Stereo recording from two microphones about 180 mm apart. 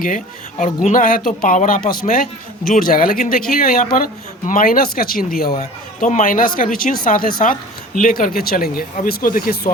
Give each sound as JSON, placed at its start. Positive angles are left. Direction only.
{"t": 0.6, "sound": "speech", "side_deg": 45}
{"t": 5.5, "sound": "speech", "side_deg": 40}